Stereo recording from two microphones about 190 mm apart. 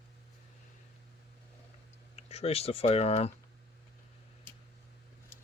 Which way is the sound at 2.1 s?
35° left (ahead or behind).